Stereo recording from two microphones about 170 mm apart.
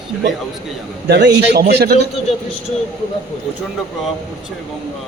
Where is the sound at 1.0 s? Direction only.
75° right (ahead or behind).